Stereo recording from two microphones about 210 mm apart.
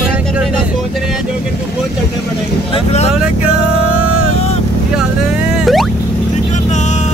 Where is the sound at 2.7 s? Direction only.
30° left (ahead or behind).